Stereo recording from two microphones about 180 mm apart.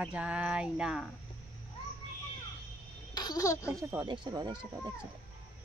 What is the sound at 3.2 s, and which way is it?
Speech, 20° left (ahead or behind).